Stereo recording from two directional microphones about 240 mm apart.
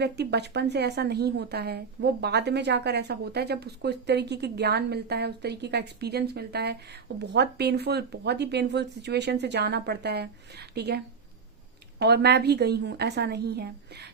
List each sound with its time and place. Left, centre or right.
0.0 s a woman's voice: right